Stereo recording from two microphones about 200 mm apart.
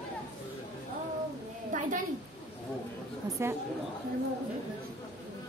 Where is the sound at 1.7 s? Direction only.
40° right (ahead or behind).